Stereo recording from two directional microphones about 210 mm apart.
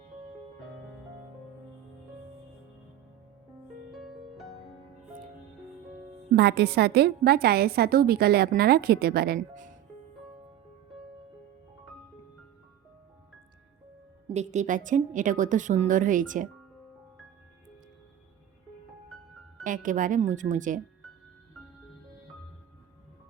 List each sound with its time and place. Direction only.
3.9 s music: centre (ahead or behind)
6.3 s a woman's voice: 50° right (ahead or behind)
14.3 s a woman's voice: 35° right (ahead or behind)
19.6 s a woman's voice: 40° right (ahead or behind)